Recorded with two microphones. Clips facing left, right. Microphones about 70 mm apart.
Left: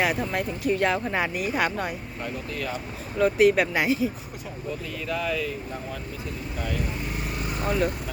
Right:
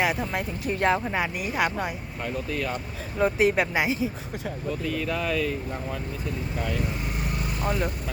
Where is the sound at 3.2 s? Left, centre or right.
Right.